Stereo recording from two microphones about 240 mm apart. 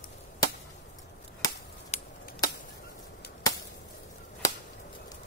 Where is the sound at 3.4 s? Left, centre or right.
Centre.